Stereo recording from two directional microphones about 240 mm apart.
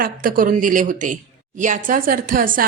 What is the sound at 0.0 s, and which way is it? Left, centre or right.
A woman's voice, right.